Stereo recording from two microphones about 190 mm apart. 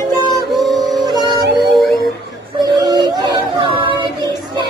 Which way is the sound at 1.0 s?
20° right (ahead or behind).